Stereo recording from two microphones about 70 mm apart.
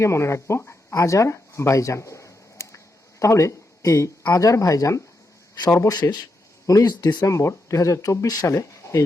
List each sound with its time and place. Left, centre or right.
0.0 s speech: left
0.6 s a sound: left
0.9 s a sound: left
4.3 s speech: left
5.9 s speech: left
6.7 s speech: left
7.3 s speech: left